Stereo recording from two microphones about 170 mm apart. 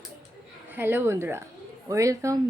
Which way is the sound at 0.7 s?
10° right (ahead or behind).